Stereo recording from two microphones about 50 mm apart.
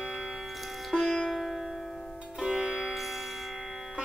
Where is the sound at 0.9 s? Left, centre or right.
Left.